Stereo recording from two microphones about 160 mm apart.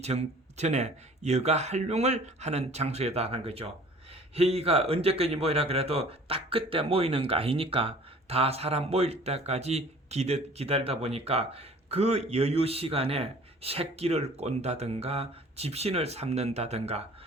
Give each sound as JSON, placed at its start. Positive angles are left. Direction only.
{"t": 0.0, "sound": "speech", "side_deg": -40}